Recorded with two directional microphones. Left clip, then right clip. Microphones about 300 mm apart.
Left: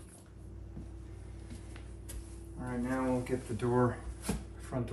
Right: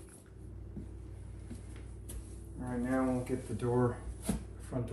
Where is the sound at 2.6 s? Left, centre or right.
Centre.